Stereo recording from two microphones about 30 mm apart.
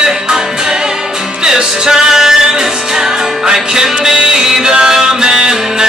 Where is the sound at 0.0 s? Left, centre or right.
Right.